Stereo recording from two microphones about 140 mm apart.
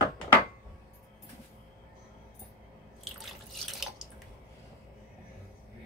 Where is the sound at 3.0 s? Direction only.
Centre (ahead or behind).